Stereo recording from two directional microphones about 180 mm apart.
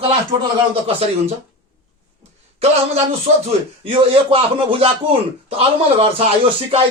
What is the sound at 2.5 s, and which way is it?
A man's voice, 35° right (ahead or behind).